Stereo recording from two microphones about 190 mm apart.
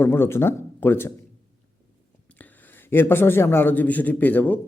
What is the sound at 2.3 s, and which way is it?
A man's voice, 10° left (ahead or behind).